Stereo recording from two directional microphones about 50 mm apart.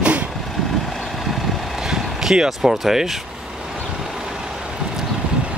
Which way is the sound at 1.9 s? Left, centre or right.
Centre.